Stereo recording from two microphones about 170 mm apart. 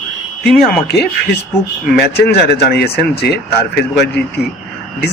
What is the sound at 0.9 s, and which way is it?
Speech, 70° left (ahead or behind).